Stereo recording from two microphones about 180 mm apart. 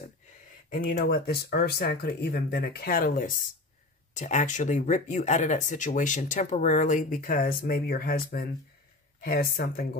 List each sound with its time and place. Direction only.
0.7 s speech: 55° left (ahead or behind)